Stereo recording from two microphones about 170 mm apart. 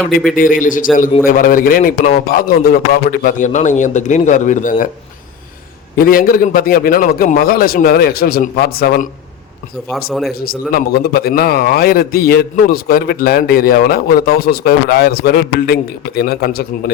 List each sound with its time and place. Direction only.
0.3 s a man's voice: 55° left (ahead or behind)
6.0 s a man's voice: 55° left (ahead or behind)
10.1 s a man's voice: centre (ahead or behind)
10.3 s a man's voice: 60° left (ahead or behind)